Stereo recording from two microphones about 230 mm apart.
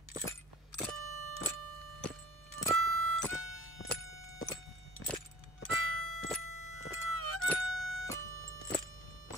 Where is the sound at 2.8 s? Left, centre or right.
Right.